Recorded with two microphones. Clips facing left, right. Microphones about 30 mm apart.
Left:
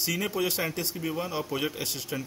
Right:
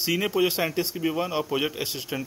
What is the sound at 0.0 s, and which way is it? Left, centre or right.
Speech, centre.